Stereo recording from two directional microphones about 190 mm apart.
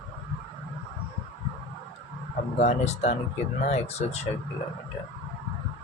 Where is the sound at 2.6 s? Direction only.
35° left (ahead or behind).